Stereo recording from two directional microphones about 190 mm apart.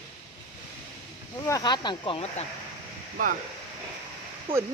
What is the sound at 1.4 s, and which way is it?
Speech, 20° left (ahead or behind).